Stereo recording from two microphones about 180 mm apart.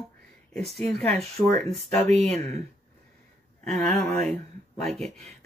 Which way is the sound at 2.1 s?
35° right (ahead or behind).